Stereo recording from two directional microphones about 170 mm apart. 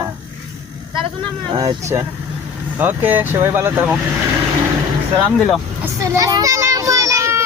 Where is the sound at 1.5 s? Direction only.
20° right (ahead or behind).